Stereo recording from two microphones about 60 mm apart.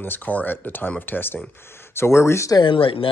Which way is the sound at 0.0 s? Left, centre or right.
Left.